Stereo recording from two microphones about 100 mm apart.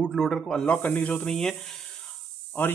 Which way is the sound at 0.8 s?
15° left (ahead or behind).